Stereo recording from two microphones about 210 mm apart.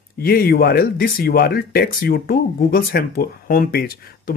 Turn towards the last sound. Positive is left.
turn(degrees=45)  # may be behind; listen again after turning